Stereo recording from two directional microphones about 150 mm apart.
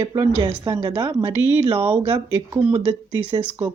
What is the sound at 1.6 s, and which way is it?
Speech, 35° right (ahead or behind).